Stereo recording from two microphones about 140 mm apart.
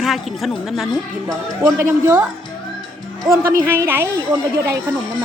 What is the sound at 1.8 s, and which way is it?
Speech, 15° right (ahead or behind).